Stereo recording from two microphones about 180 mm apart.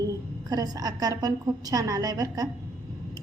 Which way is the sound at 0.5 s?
20° right (ahead or behind).